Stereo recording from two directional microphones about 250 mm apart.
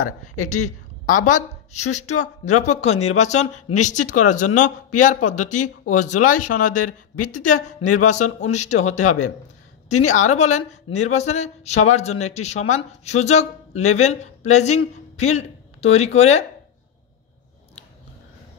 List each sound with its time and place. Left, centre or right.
1.0 s a man's voice: left